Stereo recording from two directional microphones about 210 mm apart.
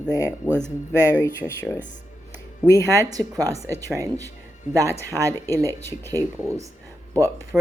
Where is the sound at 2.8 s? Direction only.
15° right (ahead or behind).